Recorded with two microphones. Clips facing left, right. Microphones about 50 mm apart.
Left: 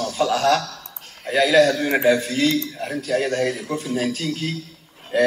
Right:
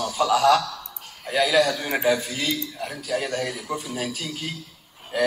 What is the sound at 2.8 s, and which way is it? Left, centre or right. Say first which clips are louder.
Speech: left 5 dB; centre.